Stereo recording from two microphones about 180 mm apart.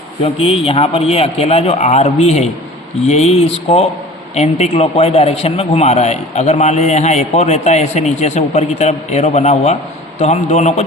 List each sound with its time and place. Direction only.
0.2 s a man's voice: 30° left (ahead or behind)